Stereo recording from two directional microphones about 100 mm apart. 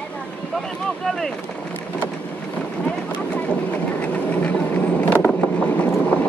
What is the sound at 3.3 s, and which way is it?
Vehicle, 15° left (ahead or behind).